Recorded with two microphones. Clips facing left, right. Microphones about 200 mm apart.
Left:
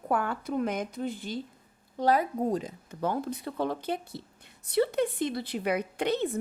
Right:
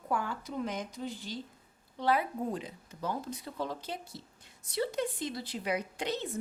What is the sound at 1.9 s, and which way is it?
A woman's voice, 40° left (ahead or behind).